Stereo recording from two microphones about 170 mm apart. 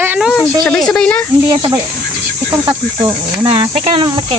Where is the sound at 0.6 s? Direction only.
5° left (ahead or behind).